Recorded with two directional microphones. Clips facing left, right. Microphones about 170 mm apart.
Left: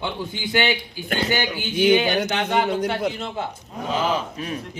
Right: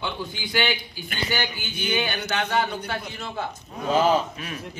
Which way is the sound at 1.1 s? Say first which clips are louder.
Left 5 dB; 65° left (ahead or behind).